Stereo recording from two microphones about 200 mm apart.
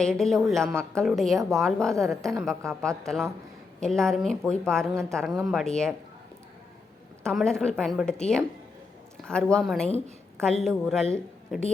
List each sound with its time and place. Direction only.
0.0 s a woman's voice: centre (ahead or behind)
7.3 s a woman's voice: 5° left (ahead or behind)